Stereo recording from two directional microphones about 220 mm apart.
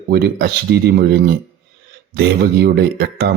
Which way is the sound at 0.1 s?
45° right (ahead or behind).